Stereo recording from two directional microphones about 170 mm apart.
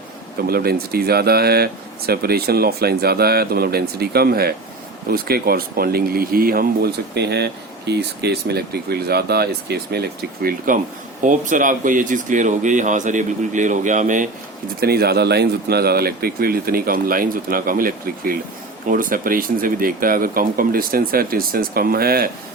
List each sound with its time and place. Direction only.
0.4 s speech: 65° right (ahead or behind)
11.2 s speech: 50° right (ahead or behind)
14.8 s speech: 65° right (ahead or behind)